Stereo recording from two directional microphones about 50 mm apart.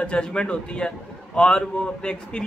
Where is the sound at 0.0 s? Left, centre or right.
Left.